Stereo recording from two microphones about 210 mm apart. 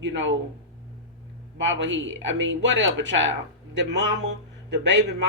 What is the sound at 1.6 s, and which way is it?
Speech, 60° right (ahead or behind).